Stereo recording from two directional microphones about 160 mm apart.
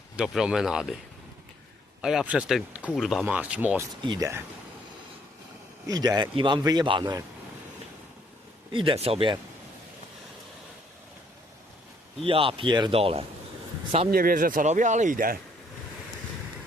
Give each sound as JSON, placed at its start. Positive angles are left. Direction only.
{"t": 0.2, "sound": "speech", "side_deg": -5}
{"t": 2.0, "sound": "speech", "side_deg": -5}
{"t": 4.0, "sound": "speech", "side_deg": -30}
{"t": 5.9, "sound": "speech", "side_deg": -25}
{"t": 8.7, "sound": "speech", "side_deg": -30}
{"t": 12.2, "sound": "speech", "side_deg": -35}
{"t": 14.1, "sound": "speech", "side_deg": -65}